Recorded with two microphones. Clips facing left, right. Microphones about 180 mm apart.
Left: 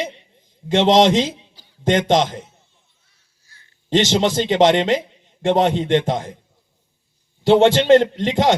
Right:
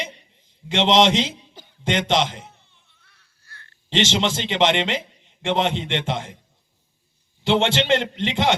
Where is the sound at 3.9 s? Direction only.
40° left (ahead or behind).